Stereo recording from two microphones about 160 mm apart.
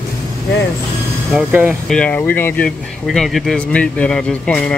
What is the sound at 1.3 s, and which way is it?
Speech, 5° right (ahead or behind).